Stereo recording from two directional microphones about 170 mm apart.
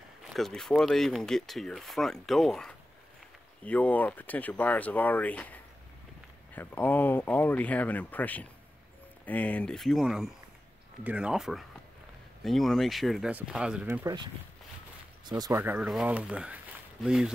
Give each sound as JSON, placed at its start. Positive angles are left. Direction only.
{"t": 0.3, "sound": "speech", "side_deg": 0}
{"t": 14.0, "sound": "speech", "side_deg": -25}
{"t": 15.6, "sound": "speech", "side_deg": -10}